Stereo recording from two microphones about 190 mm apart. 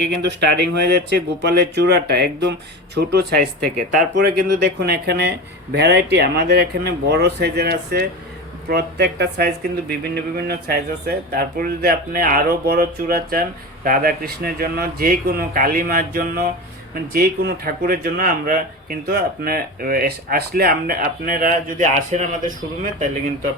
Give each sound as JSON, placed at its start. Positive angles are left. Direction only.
{"t": 0.1, "sound": "speech", "side_deg": -60}